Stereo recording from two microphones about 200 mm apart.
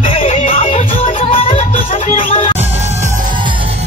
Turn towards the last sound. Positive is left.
turn(degrees=35)  # may be behind; listen again after turning